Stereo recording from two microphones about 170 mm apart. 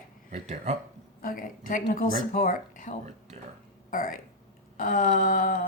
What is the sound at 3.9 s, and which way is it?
A woman's voice, 55° left (ahead or behind).